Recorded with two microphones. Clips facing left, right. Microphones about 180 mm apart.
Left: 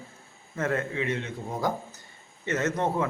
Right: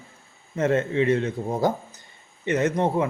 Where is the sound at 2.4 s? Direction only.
15° right (ahead or behind).